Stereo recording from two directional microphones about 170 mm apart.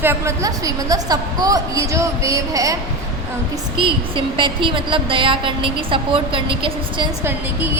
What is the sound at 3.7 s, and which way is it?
A woman's voice, 30° right (ahead or behind).